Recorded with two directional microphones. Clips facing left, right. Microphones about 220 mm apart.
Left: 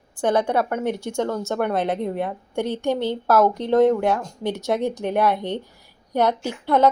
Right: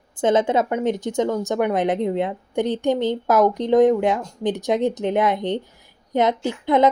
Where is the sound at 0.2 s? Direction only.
20° right (ahead or behind).